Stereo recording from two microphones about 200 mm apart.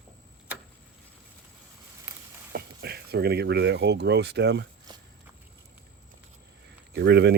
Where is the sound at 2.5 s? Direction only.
50° right (ahead or behind).